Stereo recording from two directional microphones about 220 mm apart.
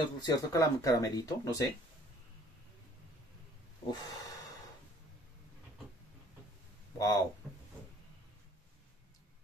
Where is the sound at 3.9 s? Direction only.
15° left (ahead or behind).